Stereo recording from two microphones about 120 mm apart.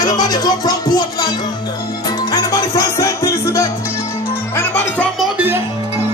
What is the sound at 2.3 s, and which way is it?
Music, 30° left (ahead or behind).